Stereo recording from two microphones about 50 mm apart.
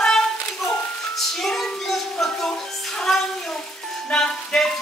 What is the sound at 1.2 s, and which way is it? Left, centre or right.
Music, centre.